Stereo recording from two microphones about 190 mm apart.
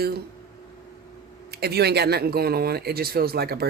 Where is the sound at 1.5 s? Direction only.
60° right (ahead or behind).